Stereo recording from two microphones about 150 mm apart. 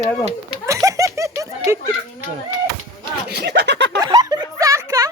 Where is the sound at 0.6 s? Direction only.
20° right (ahead or behind).